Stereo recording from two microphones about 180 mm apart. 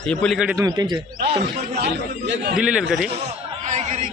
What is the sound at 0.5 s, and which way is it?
Speech, 20° right (ahead or behind).